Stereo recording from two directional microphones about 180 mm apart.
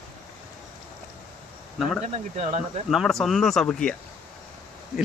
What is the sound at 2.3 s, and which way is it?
Speech, 35° right (ahead or behind).